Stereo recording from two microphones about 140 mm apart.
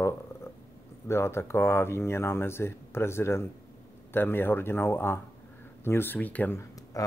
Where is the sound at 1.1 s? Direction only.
20° left (ahead or behind).